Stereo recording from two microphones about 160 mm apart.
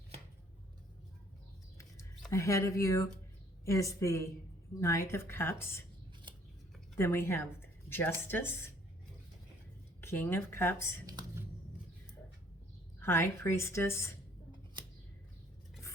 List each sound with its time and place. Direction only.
2.3 s a woman's voice: 20° left (ahead or behind)
6.9 s a woman's voice: 15° left (ahead or behind)
10.0 s a woman's voice: 15° left (ahead or behind)
11.0 s a sound: 25° right (ahead or behind)
13.0 s a woman's voice: 15° left (ahead or behind)